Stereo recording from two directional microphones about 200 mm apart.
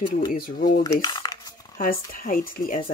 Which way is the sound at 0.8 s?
20° left (ahead or behind).